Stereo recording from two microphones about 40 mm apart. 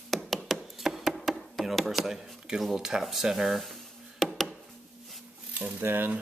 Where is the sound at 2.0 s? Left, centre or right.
Centre.